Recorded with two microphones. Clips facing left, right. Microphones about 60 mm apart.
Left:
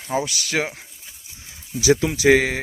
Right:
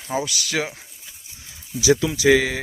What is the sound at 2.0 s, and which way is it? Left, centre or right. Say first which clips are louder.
Speech: left 1 dB; left.